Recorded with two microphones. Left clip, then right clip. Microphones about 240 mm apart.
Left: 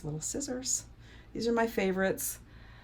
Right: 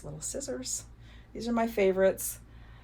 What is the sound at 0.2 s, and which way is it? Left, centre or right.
Speech, left.